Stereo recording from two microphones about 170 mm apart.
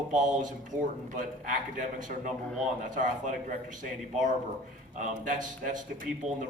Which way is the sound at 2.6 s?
50° right (ahead or behind).